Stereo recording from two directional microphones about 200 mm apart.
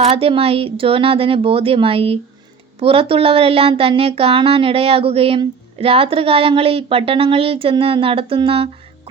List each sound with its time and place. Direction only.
0.0 s speech: 30° right (ahead or behind)